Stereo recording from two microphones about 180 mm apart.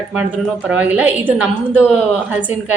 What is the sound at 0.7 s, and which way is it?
A woman's voice, 10° right (ahead or behind).